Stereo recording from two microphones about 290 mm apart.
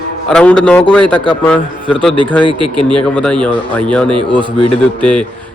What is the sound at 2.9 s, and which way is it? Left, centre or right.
A man's voice, centre.